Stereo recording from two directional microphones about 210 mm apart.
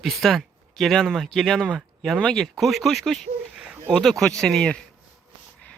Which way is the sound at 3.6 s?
10° right (ahead or behind).